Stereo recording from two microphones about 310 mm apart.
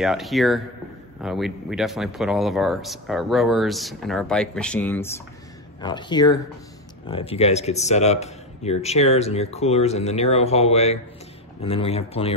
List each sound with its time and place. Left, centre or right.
0.0 s speech: centre